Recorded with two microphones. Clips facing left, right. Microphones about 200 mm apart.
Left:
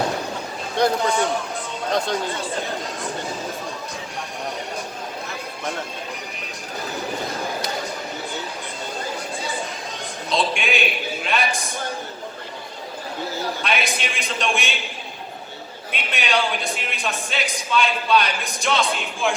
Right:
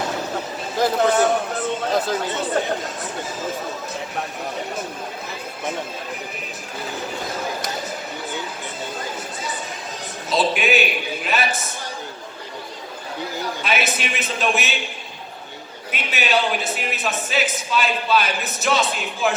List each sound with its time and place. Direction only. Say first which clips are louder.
0.8 s a man's voice: right 2 dB; 5° right (ahead or behind)
10.2 s a man's voice: right 3 dB; 5° right (ahead or behind)
13.6 s a man's voice: right 4 dB; 5° right (ahead or behind)
15.9 s a man's voice: right 2 dB; 5° right (ahead or behind)